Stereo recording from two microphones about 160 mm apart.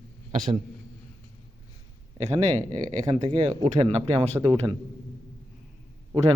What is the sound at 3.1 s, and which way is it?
A man's voice, 35° right (ahead or behind).